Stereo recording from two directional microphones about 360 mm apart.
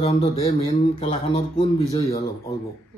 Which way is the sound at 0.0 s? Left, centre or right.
Centre.